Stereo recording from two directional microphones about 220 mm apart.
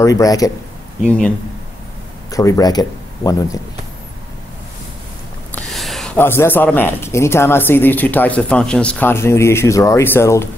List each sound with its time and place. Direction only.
0.0 s speech: 15° left (ahead or behind)
1.0 s speech: 5° left (ahead or behind)
2.3 s speech: 15° left (ahead or behind)
5.5 s speech: 5° left (ahead or behind)